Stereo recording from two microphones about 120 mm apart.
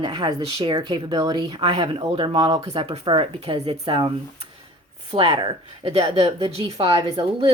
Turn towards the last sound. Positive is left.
turn(degrees=-45)  # may be behind; listen again after turning